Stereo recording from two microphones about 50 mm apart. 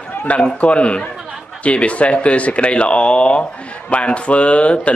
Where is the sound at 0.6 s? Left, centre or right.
Left.